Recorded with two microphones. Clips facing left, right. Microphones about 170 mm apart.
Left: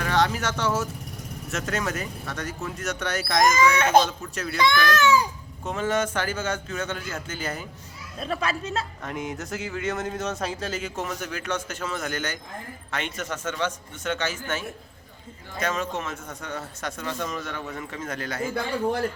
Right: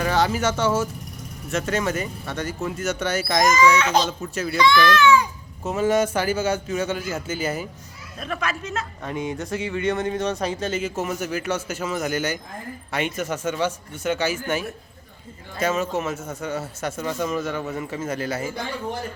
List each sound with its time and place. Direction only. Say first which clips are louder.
0.0 s speech: right 3 dB; 5° right (ahead or behind)
3.5 s speech: right 1 dB; 55° left (ahead or behind)
5.6 s a man's voice: right 5 dB; 10° right (ahead or behind)
8.2 s speech: even; 30° left (ahead or behind)
9.0 s a man's voice: right 4 dB; centre (ahead or behind)
15.6 s speech: right 5 dB; 5° right (ahead or behind)